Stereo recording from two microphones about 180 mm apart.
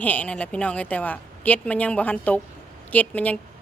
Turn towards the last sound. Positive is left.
turn(degrees=10)  # may be behind; listen again after turning